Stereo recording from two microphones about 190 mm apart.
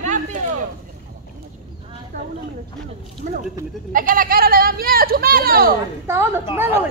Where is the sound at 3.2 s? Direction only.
40° right (ahead or behind).